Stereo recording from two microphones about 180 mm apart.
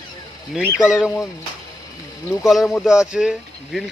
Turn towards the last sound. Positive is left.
turn(degrees=0)  # may be behind; listen again after turning